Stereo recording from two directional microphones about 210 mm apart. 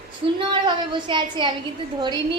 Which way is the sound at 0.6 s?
25° right (ahead or behind).